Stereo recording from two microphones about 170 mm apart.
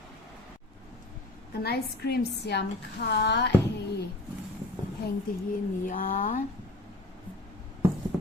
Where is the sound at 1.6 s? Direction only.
80° left.